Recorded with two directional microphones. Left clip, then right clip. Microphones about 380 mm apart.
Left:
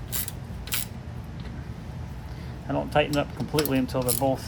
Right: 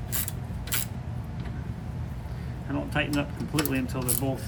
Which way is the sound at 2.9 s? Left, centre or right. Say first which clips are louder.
Left 5 dB; left.